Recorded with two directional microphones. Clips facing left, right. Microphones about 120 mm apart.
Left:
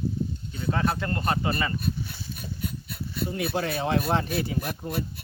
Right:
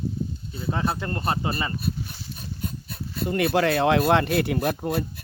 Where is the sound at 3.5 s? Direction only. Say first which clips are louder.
Right 6 dB; 70° right (ahead or behind).